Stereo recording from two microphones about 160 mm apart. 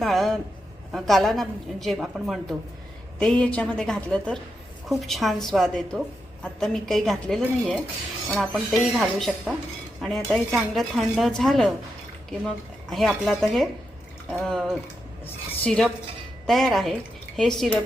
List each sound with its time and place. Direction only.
0.0 s a sound: centre (ahead or behind)
0.9 s a woman's voice: centre (ahead or behind)
12.9 s a woman's voice: centre (ahead or behind)